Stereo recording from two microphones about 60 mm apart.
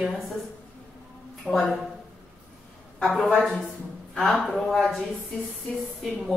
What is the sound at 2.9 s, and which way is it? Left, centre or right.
Speech, centre.